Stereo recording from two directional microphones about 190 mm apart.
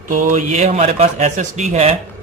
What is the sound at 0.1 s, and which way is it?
Speech, 40° right (ahead or behind).